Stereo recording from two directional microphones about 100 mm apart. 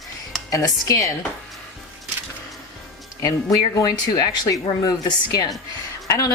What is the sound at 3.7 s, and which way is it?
Speech, 40° left (ahead or behind).